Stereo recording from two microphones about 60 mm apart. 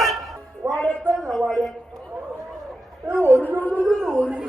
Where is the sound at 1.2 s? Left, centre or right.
Centre.